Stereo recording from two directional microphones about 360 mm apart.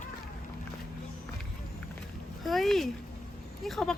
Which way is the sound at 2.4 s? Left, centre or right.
Centre.